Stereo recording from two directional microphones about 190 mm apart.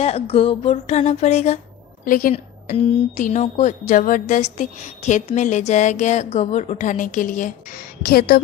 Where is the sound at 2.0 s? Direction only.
45° left (ahead or behind).